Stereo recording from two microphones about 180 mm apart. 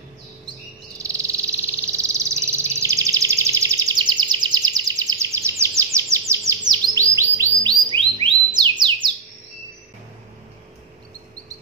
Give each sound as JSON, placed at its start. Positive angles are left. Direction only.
{"t": 0.5, "sound": "chirp", "side_deg": -15}
{"t": 1.9, "sound": "a sound", "side_deg": -15}
{"t": 5.9, "sound": "chirp", "side_deg": -15}
{"t": 7.8, "sound": "music", "side_deg": -30}